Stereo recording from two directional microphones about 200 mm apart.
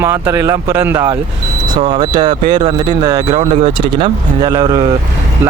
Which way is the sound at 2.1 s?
20° right (ahead or behind).